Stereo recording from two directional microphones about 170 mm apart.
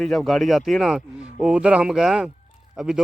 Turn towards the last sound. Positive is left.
turn(degrees=-5)  # may be behind; listen again after turning